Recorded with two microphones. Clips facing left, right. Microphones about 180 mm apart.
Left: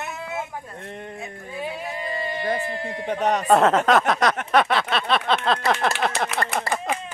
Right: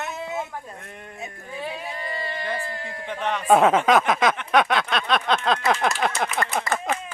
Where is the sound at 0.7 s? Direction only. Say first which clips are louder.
Left 6 dB; 30° left (ahead or behind).